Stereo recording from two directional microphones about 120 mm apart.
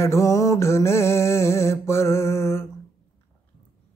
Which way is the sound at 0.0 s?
25° left (ahead or behind).